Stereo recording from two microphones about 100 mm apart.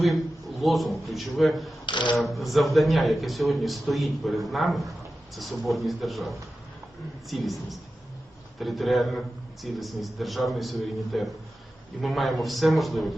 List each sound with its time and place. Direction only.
0.0 s a man's voice: centre (ahead or behind)
1.9 s speech: 50° left (ahead or behind)
2.1 s a man's voice: centre (ahead or behind)